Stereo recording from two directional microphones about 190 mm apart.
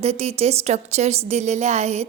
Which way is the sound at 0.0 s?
35° right (ahead or behind).